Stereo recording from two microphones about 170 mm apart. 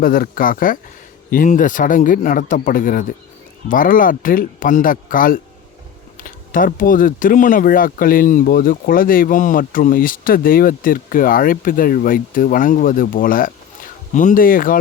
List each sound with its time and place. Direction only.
0.0 s speech: 60° left (ahead or behind)